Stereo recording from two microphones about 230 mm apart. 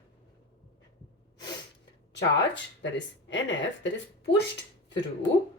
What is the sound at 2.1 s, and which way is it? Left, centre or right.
Speech, left.